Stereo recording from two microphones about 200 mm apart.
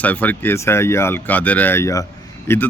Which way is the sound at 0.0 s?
10° left (ahead or behind).